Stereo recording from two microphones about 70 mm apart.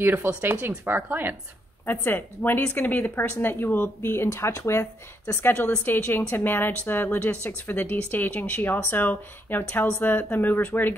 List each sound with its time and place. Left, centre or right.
0.0 s speech: right
1.9 s a woman's voice: left